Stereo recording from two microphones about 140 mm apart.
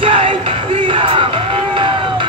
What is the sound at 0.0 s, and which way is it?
Music, 40° right (ahead or behind).